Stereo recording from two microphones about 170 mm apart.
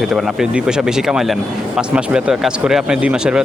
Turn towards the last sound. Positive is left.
turn(degrees=-5)  # may be behind; listen again after turning